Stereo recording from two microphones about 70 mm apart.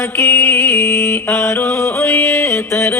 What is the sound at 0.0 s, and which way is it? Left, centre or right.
Music, left.